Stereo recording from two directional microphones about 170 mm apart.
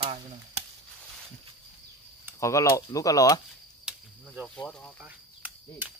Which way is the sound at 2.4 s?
20° left (ahead or behind).